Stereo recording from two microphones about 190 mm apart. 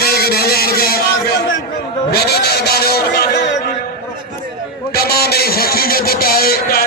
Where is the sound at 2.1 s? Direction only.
55° left (ahead or behind).